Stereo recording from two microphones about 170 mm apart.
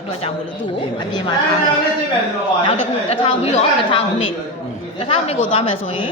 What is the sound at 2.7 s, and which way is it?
A woman's voice, 35° left (ahead or behind).